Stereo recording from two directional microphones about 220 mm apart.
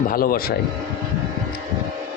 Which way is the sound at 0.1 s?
40° left (ahead or behind).